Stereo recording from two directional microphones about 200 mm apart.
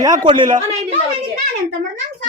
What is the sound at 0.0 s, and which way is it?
Speech, 20° right (ahead or behind).